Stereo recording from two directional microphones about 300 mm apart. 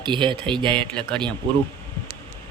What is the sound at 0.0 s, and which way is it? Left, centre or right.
Speech, centre.